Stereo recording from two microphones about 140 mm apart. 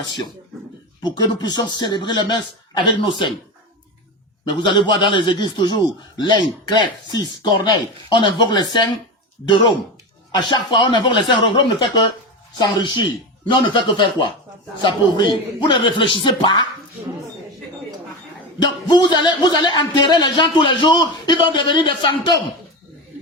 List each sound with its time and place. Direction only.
1.0 s a man's voice: 30° left (ahead or behind)
4.4 s a man's voice: 35° left (ahead or behind)
10.5 s a man's voice: 35° left (ahead or behind)
18.6 s a man's voice: 30° left (ahead or behind)